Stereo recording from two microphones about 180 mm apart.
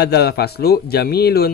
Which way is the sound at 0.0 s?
65° left (ahead or behind).